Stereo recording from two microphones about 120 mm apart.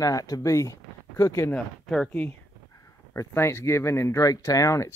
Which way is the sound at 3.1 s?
20° left (ahead or behind).